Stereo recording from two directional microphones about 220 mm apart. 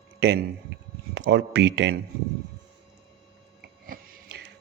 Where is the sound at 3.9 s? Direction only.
45° right (ahead or behind).